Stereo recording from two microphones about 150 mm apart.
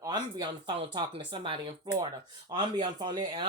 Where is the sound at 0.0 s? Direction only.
30° right (ahead or behind).